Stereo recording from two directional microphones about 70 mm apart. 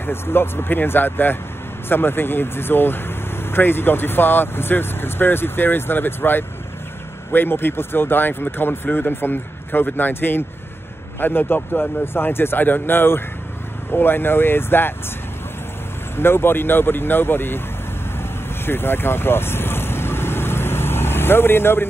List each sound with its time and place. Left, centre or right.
0.0 s speech: left
16.2 s speech: left
18.7 s vehicle: left